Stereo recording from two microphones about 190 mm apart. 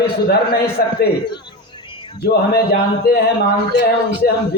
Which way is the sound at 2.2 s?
55° left (ahead or behind).